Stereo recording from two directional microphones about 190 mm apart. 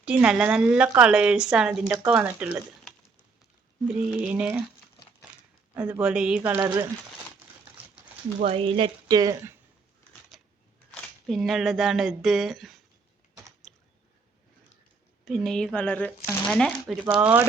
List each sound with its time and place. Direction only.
0.0 s speech: 5° right (ahead or behind)
3.8 s speech: 5° right (ahead or behind)
5.7 s speech: 10° right (ahead or behind)
6.6 s speech: 20° right (ahead or behind)
8.4 s speech: 30° right (ahead or behind)
10.3 s a sound: centre (ahead or behind)
11.3 s speech: centre (ahead or behind)
15.2 s speech: centre (ahead or behind)